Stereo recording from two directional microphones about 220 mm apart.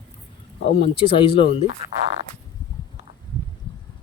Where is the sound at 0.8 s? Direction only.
25° left (ahead or behind).